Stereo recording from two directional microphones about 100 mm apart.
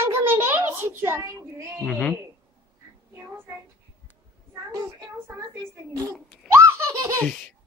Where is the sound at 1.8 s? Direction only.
10° left (ahead or behind).